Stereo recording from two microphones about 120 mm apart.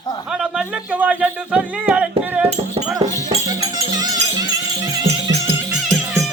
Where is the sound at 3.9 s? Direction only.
35° right (ahead or behind).